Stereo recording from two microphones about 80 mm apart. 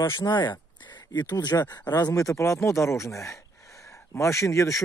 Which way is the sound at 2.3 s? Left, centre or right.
Left.